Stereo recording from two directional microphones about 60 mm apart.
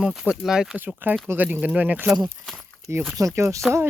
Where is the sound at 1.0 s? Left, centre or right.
Right.